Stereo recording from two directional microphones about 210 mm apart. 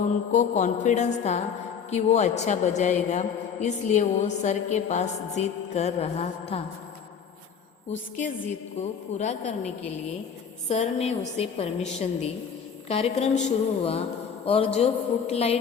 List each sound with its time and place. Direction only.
0.3 s a man's voice: 35° left (ahead or behind)
8.1 s a man's voice: 35° left (ahead or behind)
10.7 s a man's voice: 30° left (ahead or behind)